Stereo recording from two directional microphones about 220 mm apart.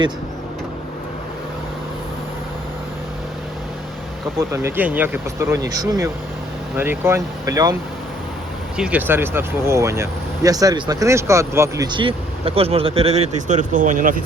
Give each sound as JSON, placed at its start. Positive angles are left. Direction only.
{"t": 4.4, "sound": "speech", "side_deg": -10}
{"t": 8.8, "sound": "speech", "side_deg": -5}